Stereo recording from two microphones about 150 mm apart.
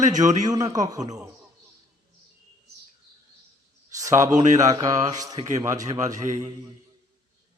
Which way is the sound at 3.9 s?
20° right (ahead or behind).